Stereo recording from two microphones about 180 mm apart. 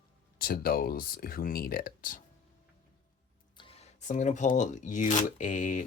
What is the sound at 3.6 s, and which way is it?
Speech, 35° left (ahead or behind).